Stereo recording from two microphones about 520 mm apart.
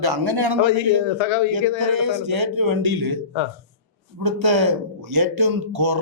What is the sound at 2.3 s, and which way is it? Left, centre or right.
Speech, right.